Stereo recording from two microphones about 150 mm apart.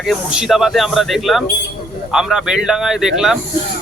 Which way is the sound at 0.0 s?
5° right (ahead or behind).